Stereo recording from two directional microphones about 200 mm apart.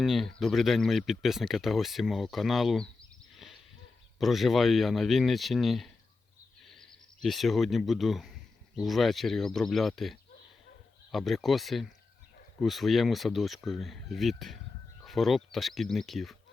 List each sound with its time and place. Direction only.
0.0 s speech: centre (ahead or behind)
4.2 s speech: centre (ahead or behind)